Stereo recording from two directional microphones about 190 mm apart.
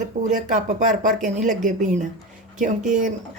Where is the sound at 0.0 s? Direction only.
40° right (ahead or behind).